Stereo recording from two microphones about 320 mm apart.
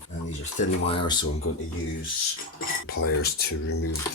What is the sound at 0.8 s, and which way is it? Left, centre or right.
Speech, centre.